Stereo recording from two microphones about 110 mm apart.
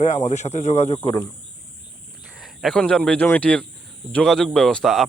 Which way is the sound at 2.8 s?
10° left (ahead or behind).